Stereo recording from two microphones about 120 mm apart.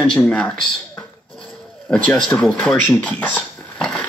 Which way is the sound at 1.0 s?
5° left (ahead or behind).